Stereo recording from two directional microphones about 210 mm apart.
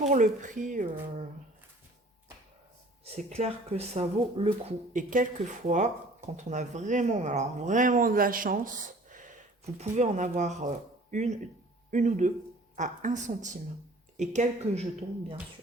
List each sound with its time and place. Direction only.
0.1 s speech: 35° right (ahead or behind)
3.0 s speech: 30° right (ahead or behind)